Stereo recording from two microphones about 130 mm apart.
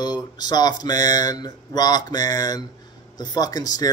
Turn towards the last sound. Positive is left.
turn(degrees=30)  # may be behind; listen again after turning